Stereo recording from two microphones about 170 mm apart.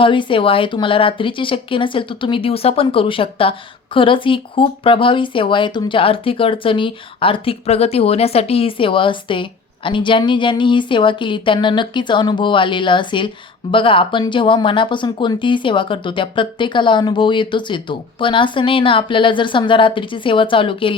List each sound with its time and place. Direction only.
0.0 s speech: 30° left (ahead or behind)